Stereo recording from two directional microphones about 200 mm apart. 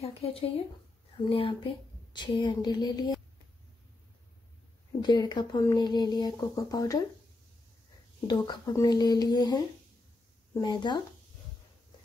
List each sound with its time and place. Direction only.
0.0 s speech: 30° left (ahead or behind)
5.0 s speech: 20° left (ahead or behind)
8.3 s speech: 20° left (ahead or behind)